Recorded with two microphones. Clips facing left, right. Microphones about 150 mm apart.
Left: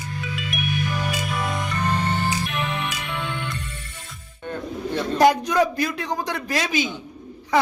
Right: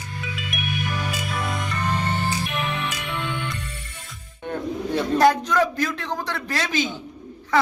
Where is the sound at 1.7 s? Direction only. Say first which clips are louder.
Left 2 dB; centre (ahead or behind).